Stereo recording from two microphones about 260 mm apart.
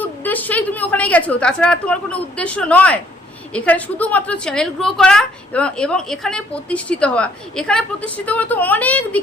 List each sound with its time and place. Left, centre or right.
0.0 s a woman's voice: centre